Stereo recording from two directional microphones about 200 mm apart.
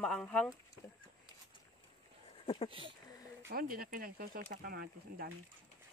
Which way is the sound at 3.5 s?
50° right (ahead or behind).